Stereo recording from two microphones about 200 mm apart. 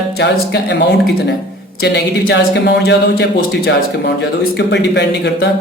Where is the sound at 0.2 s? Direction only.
60° left (ahead or behind).